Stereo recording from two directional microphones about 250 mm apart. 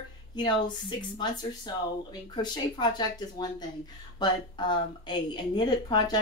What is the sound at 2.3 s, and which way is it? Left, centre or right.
A woman's voice, centre.